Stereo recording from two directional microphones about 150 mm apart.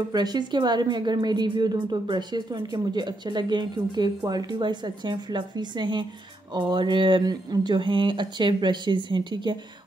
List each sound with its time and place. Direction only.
0.1 s a woman's voice: 30° right (ahead or behind)